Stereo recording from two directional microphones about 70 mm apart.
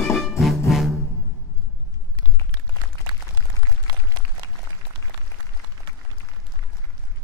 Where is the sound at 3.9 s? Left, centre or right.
Right.